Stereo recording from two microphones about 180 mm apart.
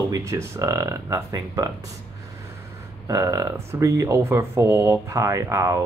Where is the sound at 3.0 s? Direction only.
20° right (ahead or behind).